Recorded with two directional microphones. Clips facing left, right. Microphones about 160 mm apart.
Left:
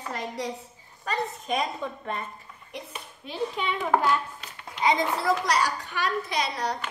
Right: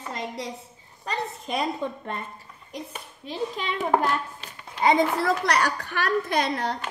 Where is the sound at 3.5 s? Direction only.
40° right (ahead or behind).